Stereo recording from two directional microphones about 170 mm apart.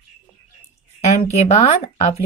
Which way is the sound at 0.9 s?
40° left (ahead or behind).